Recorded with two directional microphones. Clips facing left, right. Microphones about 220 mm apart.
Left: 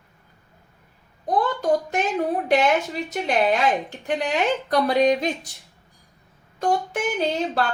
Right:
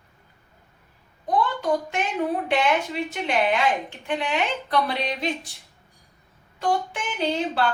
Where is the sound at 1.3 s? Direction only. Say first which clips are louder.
Left 2 dB; 40° left (ahead or behind).